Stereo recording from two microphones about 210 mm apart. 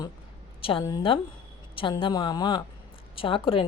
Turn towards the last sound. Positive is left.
turn(degrees=25)  # may be behind; listen again after turning